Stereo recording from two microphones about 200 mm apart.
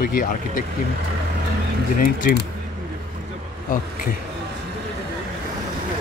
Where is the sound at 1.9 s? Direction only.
45° left (ahead or behind).